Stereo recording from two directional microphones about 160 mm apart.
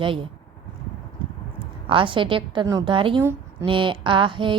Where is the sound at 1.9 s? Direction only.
30° right (ahead or behind).